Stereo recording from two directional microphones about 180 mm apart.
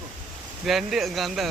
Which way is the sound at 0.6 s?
Centre (ahead or behind).